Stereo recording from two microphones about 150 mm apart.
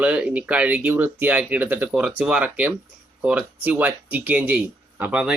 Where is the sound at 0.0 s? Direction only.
5° right (ahead or behind).